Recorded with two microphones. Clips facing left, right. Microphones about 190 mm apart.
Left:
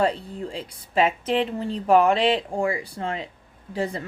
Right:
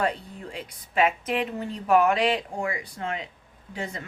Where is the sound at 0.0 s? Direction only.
30° left (ahead or behind).